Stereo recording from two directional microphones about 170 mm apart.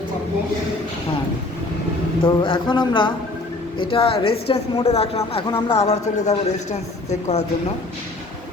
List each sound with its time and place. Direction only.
2.2 s a man's voice: 30° left (ahead or behind)